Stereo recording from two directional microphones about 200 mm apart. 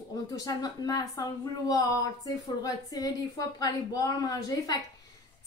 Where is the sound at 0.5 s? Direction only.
20° left (ahead or behind).